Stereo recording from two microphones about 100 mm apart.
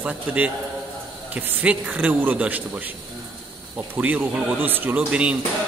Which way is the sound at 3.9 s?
15° right (ahead or behind).